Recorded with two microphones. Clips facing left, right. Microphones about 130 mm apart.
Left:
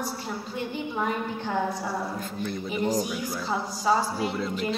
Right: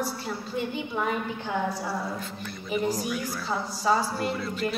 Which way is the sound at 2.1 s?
45° left (ahead or behind).